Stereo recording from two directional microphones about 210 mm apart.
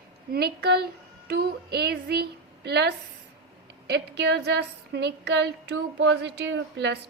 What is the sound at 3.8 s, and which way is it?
Child singing, 50° right (ahead or behind).